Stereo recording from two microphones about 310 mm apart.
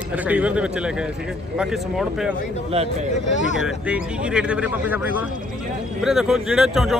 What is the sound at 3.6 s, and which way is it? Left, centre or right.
Speech, centre.